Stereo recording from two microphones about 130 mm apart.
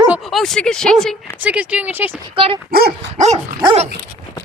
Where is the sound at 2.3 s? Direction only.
45° right (ahead or behind).